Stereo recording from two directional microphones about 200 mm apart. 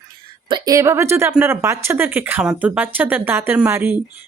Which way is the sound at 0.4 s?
20° right (ahead or behind).